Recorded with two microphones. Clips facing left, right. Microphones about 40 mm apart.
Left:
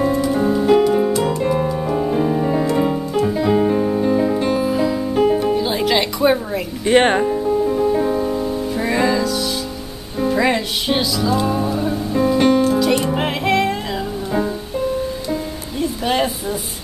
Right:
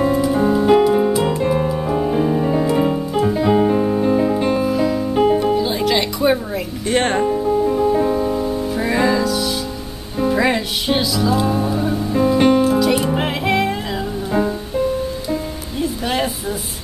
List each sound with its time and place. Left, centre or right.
0.0 s music: centre
5.6 s music: centre
6.9 s music: centre
7.2 s music: centre
15.8 s music: centre